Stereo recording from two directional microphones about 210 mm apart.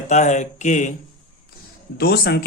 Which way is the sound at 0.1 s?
35° left (ahead or behind).